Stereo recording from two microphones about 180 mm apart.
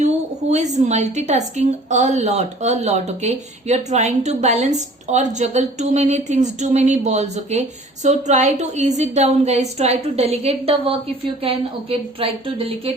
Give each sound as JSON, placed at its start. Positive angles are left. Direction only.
{"t": 0.5, "sound": "a woman's voice", "side_deg": -40}